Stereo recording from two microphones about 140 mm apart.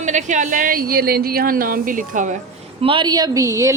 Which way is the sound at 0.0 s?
60° right (ahead or behind).